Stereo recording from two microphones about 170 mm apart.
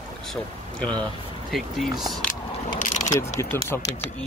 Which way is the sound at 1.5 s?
Centre (ahead or behind).